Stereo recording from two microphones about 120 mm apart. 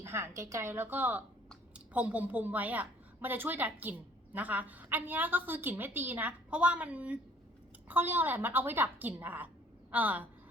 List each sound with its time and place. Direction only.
0.0 s a woman's voice: 20° right (ahead or behind)